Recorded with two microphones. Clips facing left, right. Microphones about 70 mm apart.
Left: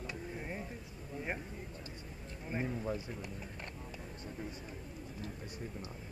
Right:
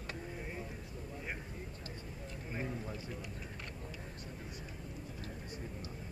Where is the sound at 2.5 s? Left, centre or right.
Left.